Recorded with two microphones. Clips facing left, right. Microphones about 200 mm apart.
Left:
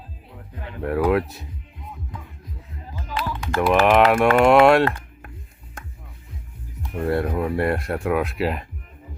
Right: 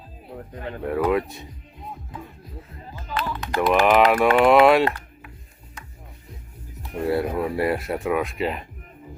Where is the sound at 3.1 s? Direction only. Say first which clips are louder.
Even; 10° left (ahead or behind).